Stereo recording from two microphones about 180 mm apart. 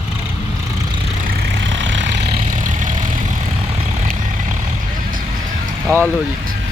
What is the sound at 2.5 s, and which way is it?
Vehicle, 45° right (ahead or behind).